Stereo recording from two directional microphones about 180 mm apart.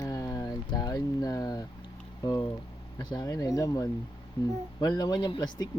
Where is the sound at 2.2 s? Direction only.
25° left (ahead or behind).